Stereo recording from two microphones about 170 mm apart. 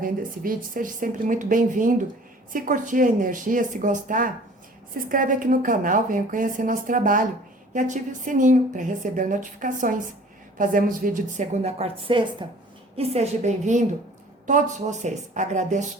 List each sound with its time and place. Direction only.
0.0 s a woman's voice: 55° right (ahead or behind); by 12.5 s 30° right (ahead or behind)
13.0 s a woman's voice: 40° right (ahead or behind)